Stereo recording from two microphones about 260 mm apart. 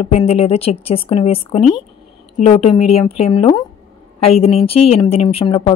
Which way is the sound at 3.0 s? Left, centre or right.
Left.